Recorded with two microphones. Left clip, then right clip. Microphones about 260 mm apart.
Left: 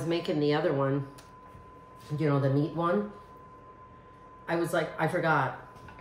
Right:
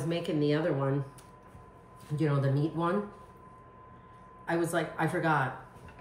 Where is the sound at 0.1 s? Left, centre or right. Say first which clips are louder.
Left 2 dB; centre.